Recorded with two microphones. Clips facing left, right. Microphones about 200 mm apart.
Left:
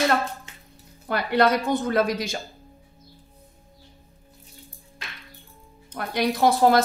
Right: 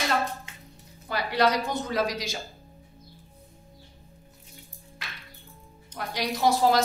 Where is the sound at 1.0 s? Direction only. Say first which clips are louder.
Left 4 dB; 55° left (ahead or behind).